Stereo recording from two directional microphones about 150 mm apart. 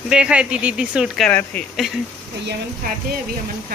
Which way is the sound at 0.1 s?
5° right (ahead or behind).